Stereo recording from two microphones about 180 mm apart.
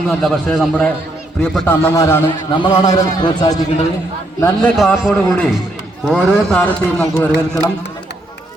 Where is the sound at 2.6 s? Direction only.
25° left (ahead or behind).